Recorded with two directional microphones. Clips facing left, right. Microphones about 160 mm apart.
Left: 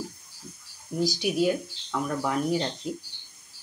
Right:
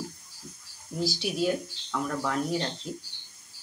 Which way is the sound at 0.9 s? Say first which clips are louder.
Left 4 dB; 15° left (ahead or behind).